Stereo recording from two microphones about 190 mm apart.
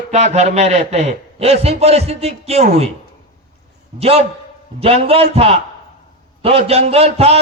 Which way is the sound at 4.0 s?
30° right (ahead or behind).